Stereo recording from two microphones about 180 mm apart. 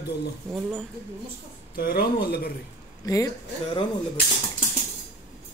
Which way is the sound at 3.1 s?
20° left (ahead or behind).